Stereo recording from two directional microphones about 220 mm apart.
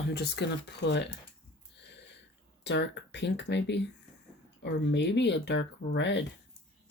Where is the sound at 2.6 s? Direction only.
50° left (ahead or behind).